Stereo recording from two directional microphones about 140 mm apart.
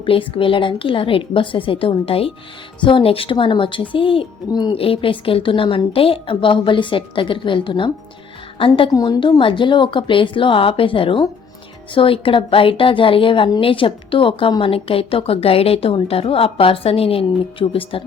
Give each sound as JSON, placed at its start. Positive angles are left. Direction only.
{"t": 0.0, "sound": "speech", "side_deg": 40}
{"t": 8.9, "sound": "a woman's voice", "side_deg": 25}